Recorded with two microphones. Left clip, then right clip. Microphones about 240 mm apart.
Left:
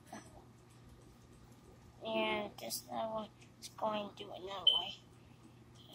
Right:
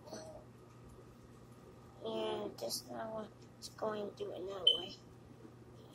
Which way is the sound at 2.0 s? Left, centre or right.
Left.